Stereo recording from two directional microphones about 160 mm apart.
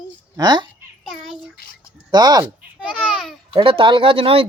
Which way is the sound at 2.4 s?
5° right (ahead or behind).